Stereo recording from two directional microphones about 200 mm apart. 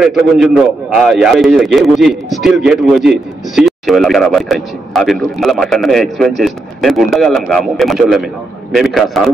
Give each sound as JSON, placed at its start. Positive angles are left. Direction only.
{"t": 0.0, "sound": "a man's voice", "side_deg": -5}